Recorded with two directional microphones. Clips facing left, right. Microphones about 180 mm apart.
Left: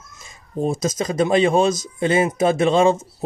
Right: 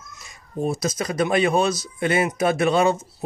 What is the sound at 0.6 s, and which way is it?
A man's voice, 25° left (ahead or behind).